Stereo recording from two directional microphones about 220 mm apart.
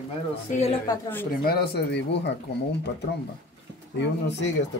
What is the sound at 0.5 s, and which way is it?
Speech, 30° left (ahead or behind).